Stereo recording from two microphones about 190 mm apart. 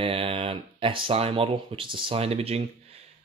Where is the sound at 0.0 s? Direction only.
30° right (ahead or behind).